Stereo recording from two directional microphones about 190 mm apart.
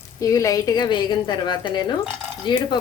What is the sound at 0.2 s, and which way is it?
A woman's voice, 15° left (ahead or behind).